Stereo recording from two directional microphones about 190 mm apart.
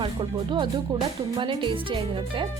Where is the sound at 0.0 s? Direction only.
25° right (ahead or behind).